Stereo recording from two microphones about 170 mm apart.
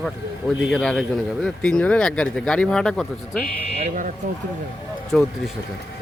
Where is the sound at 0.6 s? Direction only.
Centre (ahead or behind).